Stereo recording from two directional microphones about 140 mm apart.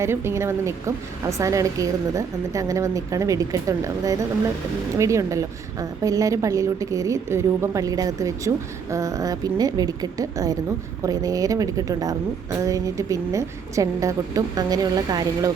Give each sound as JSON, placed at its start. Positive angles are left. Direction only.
{"t": 0.0, "sound": "a woman's voice", "side_deg": -20}